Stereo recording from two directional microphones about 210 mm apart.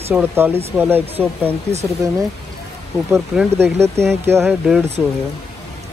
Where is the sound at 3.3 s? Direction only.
10° right (ahead or behind).